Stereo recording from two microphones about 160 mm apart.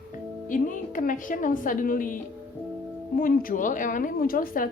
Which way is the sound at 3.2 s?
60° left (ahead or behind).